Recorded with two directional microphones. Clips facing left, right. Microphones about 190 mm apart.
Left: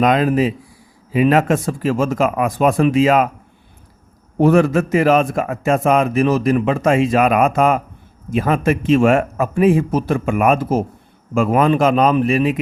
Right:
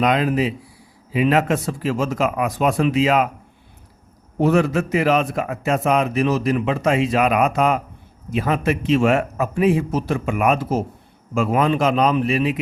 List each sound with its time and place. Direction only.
0.0 s a man's voice: 45° left (ahead or behind)
4.4 s a man's voice: 50° left (ahead or behind)